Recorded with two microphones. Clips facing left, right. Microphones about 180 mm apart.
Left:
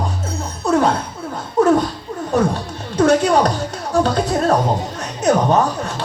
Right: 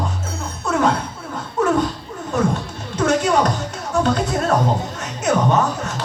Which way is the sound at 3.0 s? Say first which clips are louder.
Left 4 dB; 35° left (ahead or behind).